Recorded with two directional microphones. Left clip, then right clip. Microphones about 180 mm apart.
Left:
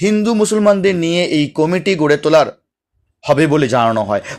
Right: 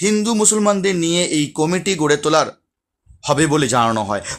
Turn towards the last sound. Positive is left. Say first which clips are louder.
# left 4 dB
turn(degrees=5)  # may be behind; listen again after turning